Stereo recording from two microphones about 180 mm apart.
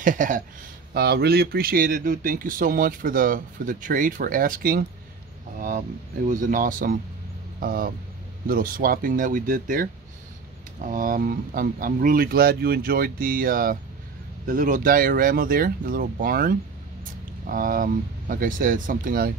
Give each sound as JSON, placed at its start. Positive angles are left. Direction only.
{"t": 0.0, "sound": "speech", "side_deg": -45}
{"t": 0.9, "sound": "speech", "side_deg": -60}
{"t": 10.9, "sound": "speech", "side_deg": -50}